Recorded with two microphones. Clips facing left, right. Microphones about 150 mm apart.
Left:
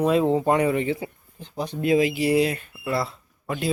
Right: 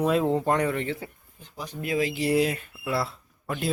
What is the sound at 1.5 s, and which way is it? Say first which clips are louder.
Speech: left 7 dB; 30° left (ahead or behind).